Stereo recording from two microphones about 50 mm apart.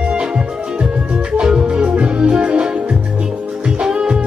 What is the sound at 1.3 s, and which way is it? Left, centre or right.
Music, centre.